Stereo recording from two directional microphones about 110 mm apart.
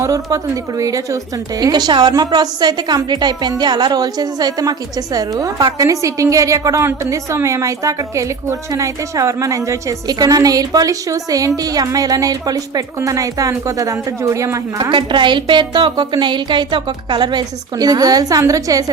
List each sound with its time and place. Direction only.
0.0 s a woman's voice: 30° right (ahead or behind)
14.8 s a woman's voice: 45° right (ahead or behind)